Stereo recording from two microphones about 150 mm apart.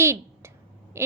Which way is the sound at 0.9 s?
15° right (ahead or behind).